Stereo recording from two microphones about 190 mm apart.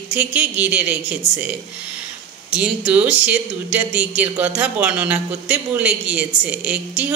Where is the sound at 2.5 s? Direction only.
5° right (ahead or behind).